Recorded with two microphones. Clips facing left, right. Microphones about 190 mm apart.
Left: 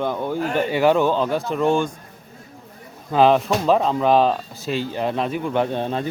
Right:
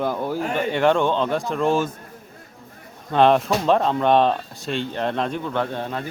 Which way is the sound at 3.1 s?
Centre (ahead or behind).